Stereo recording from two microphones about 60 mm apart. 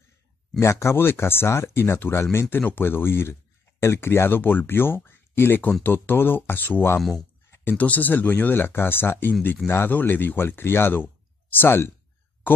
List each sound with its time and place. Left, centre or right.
0.6 s speech: left
0.9 s speech: left
7.0 s speech: centre
7.7 s speech: left